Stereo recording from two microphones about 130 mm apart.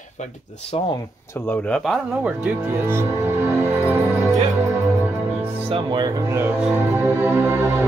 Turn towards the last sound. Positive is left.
turn(degrees=-20)  # may be behind; listen again after turning